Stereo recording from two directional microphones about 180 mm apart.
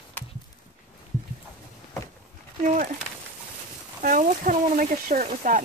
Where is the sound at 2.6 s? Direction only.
45° right (ahead or behind).